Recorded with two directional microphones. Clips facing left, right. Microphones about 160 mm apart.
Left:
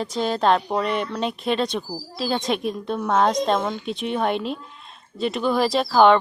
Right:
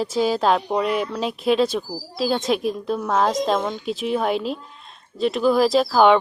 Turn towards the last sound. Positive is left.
turn(degrees=0)  # may be behind; listen again after turning